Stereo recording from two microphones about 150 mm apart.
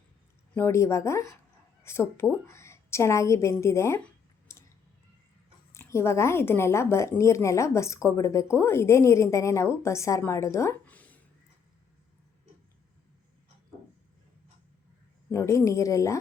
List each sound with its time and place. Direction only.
0.5 s a woman's voice: 15° left (ahead or behind)
4.5 s a sound: 20° left (ahead or behind)
5.7 s a woman's voice: 15° left (ahead or behind)
15.3 s a woman's voice: 20° left (ahead or behind)